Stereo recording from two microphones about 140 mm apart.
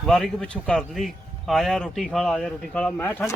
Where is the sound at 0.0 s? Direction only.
5° left (ahead or behind).